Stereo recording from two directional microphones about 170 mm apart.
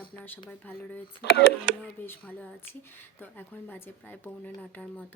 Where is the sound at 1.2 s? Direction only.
80° left.